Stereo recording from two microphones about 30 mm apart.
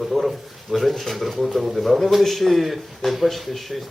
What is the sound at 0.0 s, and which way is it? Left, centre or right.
Speech, centre.